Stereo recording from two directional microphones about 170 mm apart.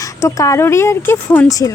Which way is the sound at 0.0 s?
20° left (ahead or behind).